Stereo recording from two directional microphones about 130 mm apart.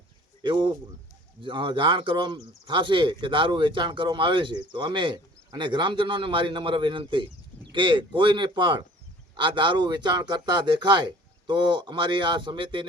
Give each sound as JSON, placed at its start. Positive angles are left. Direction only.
{"t": 0.4, "sound": "speech", "side_deg": -40}